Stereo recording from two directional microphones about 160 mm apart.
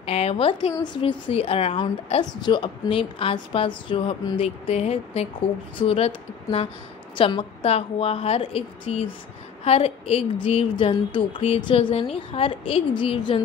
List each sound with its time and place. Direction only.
0.0 s a woman's voice: 40° left (ahead or behind)